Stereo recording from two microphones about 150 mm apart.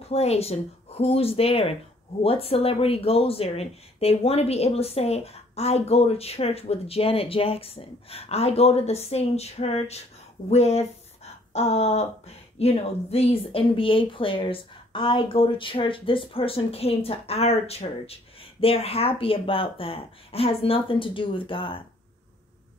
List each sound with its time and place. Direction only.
0.0 s speech: 45° left (ahead or behind)